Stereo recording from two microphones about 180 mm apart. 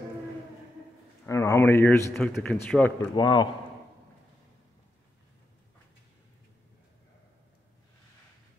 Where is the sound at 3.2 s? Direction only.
25° left (ahead or behind).